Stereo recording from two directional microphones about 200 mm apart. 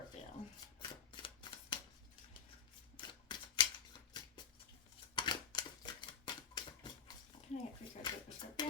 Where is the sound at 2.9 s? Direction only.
25° left (ahead or behind).